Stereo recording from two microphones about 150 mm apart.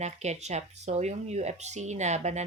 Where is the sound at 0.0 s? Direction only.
50° right (ahead or behind).